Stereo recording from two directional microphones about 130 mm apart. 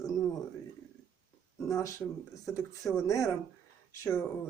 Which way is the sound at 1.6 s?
25° left (ahead or behind).